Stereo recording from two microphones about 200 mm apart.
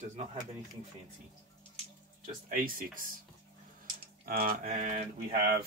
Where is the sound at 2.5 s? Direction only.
45° right (ahead or behind).